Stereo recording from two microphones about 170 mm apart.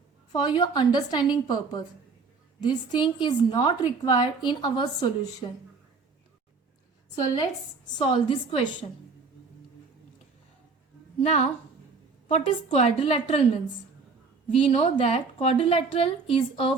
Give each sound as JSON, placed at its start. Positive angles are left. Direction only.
{"t": 0.3, "sound": "a woman's voice", "side_deg": 30}
{"t": 7.9, "sound": "a woman's voice", "side_deg": 30}
{"t": 11.2, "sound": "a woman's voice", "side_deg": 40}
{"t": 14.5, "sound": "a woman's voice", "side_deg": 35}